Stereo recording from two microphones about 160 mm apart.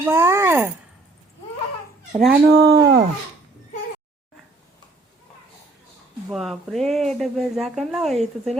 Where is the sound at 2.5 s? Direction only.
25° right (ahead or behind).